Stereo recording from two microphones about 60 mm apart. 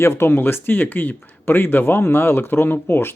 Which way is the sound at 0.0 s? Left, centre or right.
Left.